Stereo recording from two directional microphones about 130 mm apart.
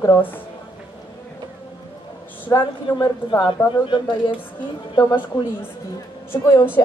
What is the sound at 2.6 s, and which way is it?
A woman's voice, 35° left (ahead or behind).